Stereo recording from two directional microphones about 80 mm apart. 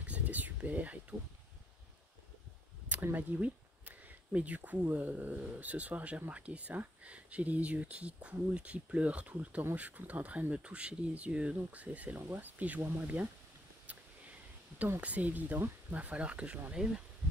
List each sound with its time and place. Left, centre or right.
0.0 s a sound: centre
2.9 s speech: right
15.0 s speech: centre